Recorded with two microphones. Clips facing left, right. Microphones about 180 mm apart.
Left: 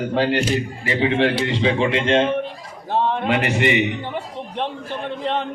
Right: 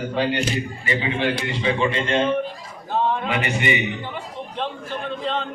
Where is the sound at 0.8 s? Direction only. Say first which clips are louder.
Left 5 dB; 75° left (ahead or behind).